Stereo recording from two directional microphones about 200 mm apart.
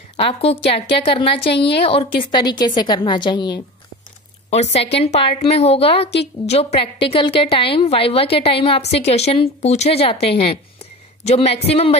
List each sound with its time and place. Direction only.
0.2 s a woman's voice: 30° left (ahead or behind)
4.5 s a woman's voice: 30° left (ahead or behind)